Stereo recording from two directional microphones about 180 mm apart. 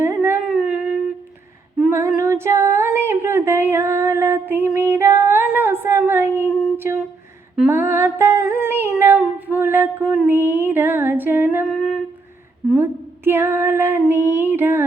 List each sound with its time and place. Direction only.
0.0 s howl: 15° right (ahead or behind)
0.4 s a sound: centre (ahead or behind)
1.9 s female singing: 15° right (ahead or behind)
2.7 s a sound: 15° right (ahead or behind)
6.5 s humming: centre (ahead or behind)
6.7 s humming: 15° right (ahead or behind)
7.5 s female singing: 10° right (ahead or behind)
11.6 s humming: centre (ahead or behind)
12.7 s female singing: 15° right (ahead or behind)